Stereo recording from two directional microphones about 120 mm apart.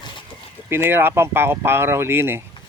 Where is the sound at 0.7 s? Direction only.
20° right (ahead or behind).